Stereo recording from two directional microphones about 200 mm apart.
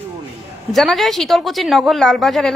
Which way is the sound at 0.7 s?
Centre (ahead or behind).